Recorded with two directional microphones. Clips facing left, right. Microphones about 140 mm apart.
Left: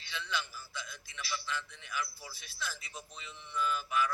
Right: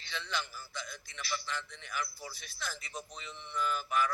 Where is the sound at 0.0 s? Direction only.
50° right (ahead or behind).